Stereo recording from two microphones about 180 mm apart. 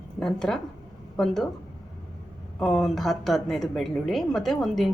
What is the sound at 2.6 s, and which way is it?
A woman's voice, centre (ahead or behind).